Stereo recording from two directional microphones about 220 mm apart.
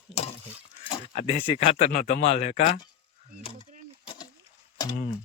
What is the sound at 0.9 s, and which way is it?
Speech, 25° left (ahead or behind).